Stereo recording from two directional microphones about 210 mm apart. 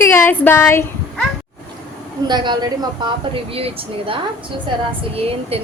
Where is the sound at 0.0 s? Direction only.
10° left (ahead or behind).